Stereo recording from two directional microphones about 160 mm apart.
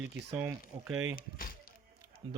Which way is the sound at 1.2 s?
65° left (ahead or behind).